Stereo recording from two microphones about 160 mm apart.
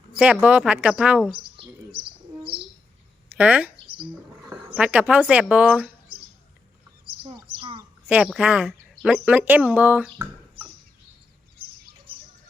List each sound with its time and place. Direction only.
0.2 s speech: 10° right (ahead or behind)
1.4 s bird: 35° right (ahead or behind)
3.2 s speech: 10° right (ahead or behind)
4.7 s speech: 10° right (ahead or behind)
7.1 s a sound: 35° right (ahead or behind)
8.0 s speech: 5° right (ahead or behind)